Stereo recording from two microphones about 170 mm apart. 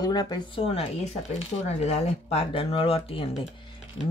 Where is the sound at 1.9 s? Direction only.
40° left (ahead or behind).